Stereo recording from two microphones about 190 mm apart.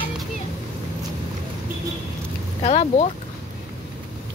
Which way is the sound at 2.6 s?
35° left (ahead or behind).